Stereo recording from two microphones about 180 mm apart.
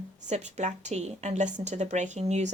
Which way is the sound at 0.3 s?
40° right (ahead or behind).